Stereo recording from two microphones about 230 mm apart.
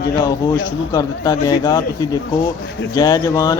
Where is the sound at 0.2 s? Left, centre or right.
Centre.